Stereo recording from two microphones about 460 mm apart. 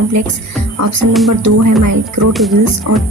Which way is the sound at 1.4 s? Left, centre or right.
Right.